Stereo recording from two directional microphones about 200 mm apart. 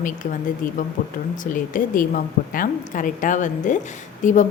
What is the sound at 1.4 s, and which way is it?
A woman's voice, 40° left (ahead or behind).